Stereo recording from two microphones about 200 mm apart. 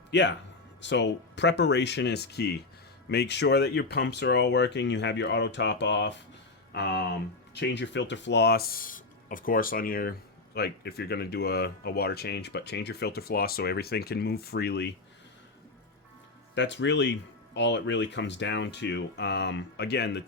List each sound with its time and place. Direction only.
0.1 s a man's voice: 60° left (ahead or behind)
16.6 s speech: 60° left (ahead or behind)